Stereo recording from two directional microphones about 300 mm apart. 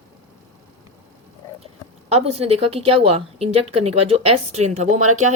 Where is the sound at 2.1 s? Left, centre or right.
Right.